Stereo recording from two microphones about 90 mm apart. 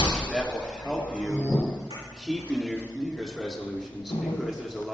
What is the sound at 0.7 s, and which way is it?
A man's voice, centre (ahead or behind).